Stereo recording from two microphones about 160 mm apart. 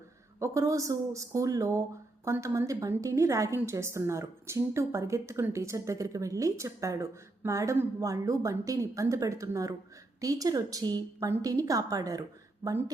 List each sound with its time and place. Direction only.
0.3 s a woman's voice: 20° right (ahead or behind)